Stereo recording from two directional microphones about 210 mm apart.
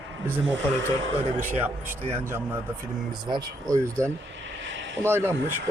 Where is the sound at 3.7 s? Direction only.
15° right (ahead or behind).